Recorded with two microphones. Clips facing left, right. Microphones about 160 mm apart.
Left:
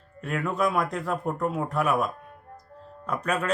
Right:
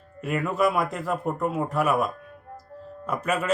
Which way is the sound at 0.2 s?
5° right (ahead or behind).